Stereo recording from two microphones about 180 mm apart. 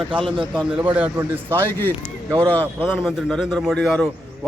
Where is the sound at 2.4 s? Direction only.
10° left (ahead or behind).